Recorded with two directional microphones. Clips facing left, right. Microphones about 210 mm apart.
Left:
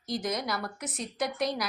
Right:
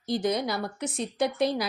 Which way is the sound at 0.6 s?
30° right (ahead or behind).